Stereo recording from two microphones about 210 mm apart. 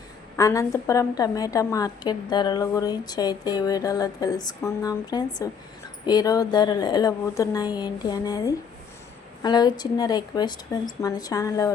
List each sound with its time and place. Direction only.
0.3 s a woman's voice: 15° left (ahead or behind)